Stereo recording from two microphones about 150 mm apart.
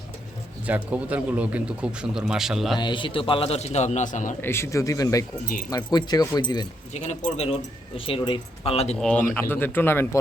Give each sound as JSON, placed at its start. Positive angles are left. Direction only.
{"t": 0.7, "sound": "a man's voice", "side_deg": -10}
{"t": 2.7, "sound": "a man's voice", "side_deg": 30}
{"t": 4.4, "sound": "speech", "side_deg": 15}
{"t": 6.9, "sound": "speech", "side_deg": 50}
{"t": 7.9, "sound": "a man's voice", "side_deg": 35}
{"t": 9.0, "sound": "speech", "side_deg": 10}